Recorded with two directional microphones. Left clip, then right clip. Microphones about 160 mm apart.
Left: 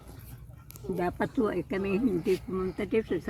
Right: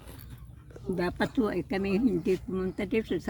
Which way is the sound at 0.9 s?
45° right (ahead or behind).